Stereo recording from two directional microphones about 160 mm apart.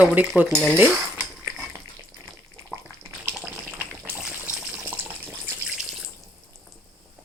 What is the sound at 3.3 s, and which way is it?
Water, 10° right (ahead or behind).